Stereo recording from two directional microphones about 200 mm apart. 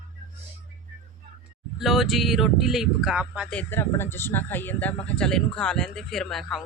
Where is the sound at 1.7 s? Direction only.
Centre (ahead or behind).